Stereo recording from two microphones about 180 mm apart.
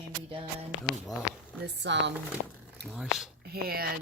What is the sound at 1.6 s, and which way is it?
Speech, 70° right (ahead or behind).